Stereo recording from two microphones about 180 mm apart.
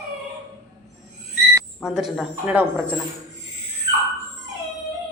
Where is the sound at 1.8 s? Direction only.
Centre (ahead or behind).